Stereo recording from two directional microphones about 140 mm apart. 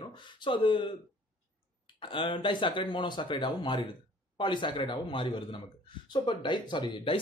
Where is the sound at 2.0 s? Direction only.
35° left (ahead or behind).